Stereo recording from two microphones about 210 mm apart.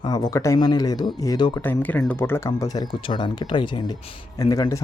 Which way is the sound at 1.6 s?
10° left (ahead or behind).